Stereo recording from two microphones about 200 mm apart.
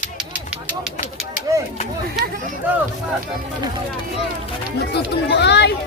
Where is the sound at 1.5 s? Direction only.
20° right (ahead or behind).